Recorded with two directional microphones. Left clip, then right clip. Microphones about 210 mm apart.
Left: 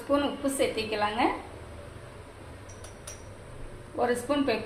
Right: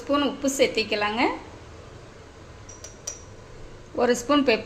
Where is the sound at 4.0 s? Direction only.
55° right (ahead or behind).